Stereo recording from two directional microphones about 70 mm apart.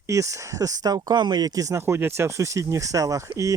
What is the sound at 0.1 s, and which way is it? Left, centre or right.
Speech, right.